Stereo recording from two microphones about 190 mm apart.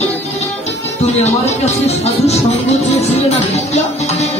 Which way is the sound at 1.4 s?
35° left (ahead or behind).